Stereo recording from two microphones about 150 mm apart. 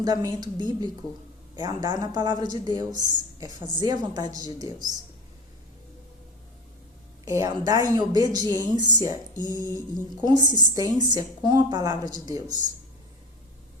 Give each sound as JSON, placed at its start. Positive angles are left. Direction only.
{"t": 0.0, "sound": "a woman's voice", "side_deg": -25}
{"t": 7.3, "sound": "a woman's voice", "side_deg": -20}
{"t": 9.4, "sound": "a sound", "side_deg": 25}
{"t": 10.2, "sound": "a woman's voice", "side_deg": -30}